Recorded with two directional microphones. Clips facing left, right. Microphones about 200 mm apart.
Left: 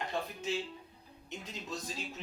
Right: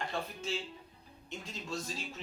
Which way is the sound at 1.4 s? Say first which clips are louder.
Right 2 dB; 20° left (ahead or behind).